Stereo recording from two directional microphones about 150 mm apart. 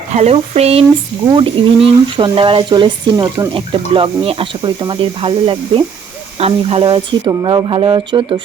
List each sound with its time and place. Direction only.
0.1 s speech: 45° right (ahead or behind); by 8.4 s 30° right (ahead or behind)